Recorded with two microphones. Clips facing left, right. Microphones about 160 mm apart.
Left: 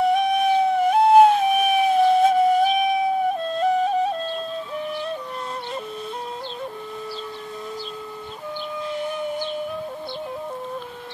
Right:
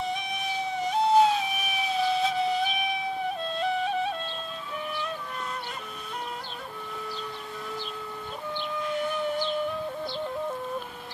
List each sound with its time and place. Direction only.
0.0 s music: 60° left (ahead or behind); by 4.1 s 40° left (ahead or behind)